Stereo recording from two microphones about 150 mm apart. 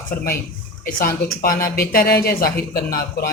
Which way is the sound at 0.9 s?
70° left (ahead or behind).